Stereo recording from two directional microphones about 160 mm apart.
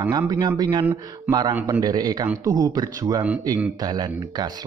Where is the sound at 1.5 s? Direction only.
10° right (ahead or behind).